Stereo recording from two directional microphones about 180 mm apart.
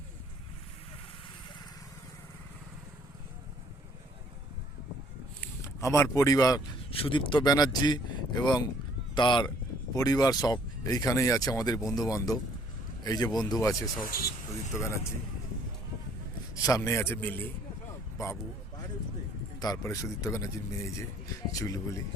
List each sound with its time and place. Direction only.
5.4 s a man's voice: 15° left (ahead or behind)
16.6 s speech: 20° left (ahead or behind)
19.6 s speech: 20° left (ahead or behind)